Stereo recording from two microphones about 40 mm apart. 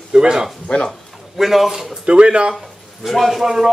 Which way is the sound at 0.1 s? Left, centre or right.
Centre.